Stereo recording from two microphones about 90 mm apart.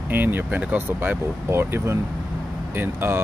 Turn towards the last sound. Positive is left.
turn(degrees=-25)  # may be behind; listen again after turning